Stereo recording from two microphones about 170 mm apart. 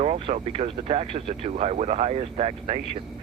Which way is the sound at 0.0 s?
40° right (ahead or behind).